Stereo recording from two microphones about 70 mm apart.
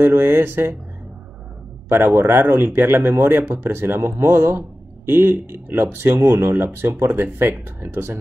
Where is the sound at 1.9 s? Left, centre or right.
Right.